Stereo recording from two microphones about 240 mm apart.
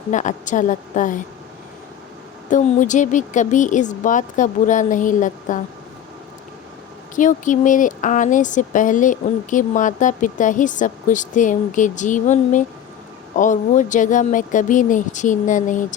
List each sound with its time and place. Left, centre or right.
0.1 s speech: left
2.5 s speech: left
7.2 s speech: left